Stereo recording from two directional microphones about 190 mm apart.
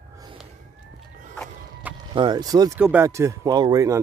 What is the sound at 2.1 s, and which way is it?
Speech, 25° right (ahead or behind).